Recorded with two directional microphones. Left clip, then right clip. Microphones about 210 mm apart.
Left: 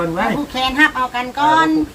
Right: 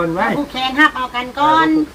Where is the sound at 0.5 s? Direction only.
10° right (ahead or behind).